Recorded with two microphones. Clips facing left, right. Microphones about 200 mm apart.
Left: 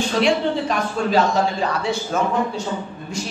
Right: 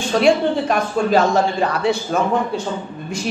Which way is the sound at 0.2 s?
50° right (ahead or behind).